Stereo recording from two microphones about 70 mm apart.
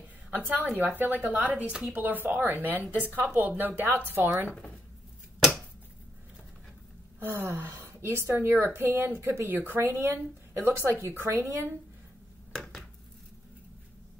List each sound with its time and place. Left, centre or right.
0.3 s a woman's voice: right
4.5 s speech: centre
7.2 s speech: right
12.5 s a sound: centre